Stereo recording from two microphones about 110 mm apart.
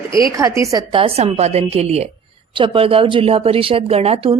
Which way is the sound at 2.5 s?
50° right (ahead or behind).